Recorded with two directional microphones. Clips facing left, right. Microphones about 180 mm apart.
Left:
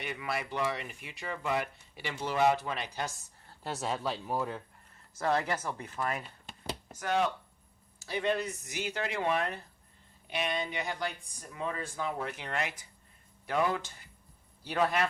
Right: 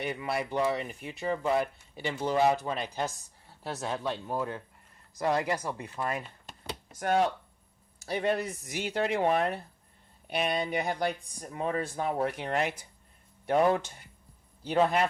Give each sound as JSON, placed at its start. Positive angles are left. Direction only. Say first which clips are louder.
{"t": 0.0, "sound": "speech", "louder": "right 4 dB", "side_deg": -35}
{"t": 3.4, "sound": "speech", "louder": "even", "side_deg": -5}
{"t": 5.1, "sound": "speech", "louder": "right 2 dB", "side_deg": -15}
{"t": 5.8, "sound": "speech", "louder": "right 1 dB", "side_deg": -30}
{"t": 7.0, "sound": "speech", "louder": "right 4 dB", "side_deg": -45}
{"t": 14.7, "sound": "speech", "louder": "right 4 dB", "side_deg": -25}